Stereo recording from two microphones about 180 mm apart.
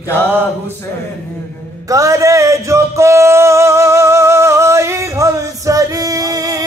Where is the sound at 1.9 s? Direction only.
20° right (ahead or behind).